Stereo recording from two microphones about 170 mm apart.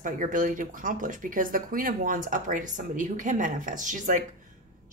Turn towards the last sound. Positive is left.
turn(degrees=-50)  # may be behind; listen again after turning